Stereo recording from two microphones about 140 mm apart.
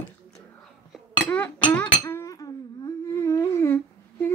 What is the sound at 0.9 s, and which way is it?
Chink, 10° left (ahead or behind).